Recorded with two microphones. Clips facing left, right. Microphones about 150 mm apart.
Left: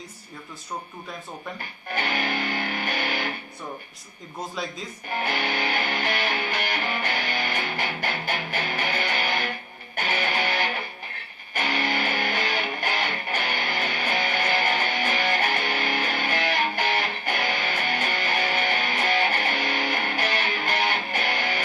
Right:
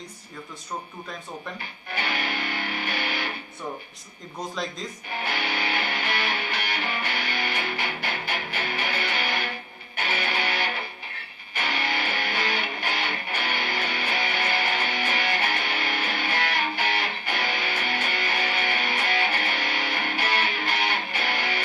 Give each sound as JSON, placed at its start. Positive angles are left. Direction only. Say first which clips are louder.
{"t": 1.9, "sound": "music", "louder": "left 3 dB", "side_deg": 45}
{"t": 5.0, "sound": "music", "louder": "left 4 dB", "side_deg": 45}